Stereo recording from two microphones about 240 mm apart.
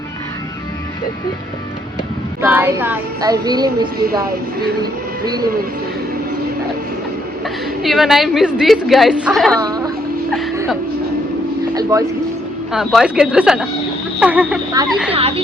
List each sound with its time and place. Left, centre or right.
2.4 s child singing: centre
3.9 s a woman's voice: right
4.8 s speech: centre
7.8 s a woman's voice: centre
9.6 s a woman's voice: centre
11.7 s speech: centre
12.7 s a woman's voice: centre
15.1 s speech: right